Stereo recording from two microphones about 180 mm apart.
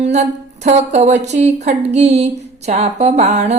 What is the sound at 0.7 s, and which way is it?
Speech, 40° right (ahead or behind).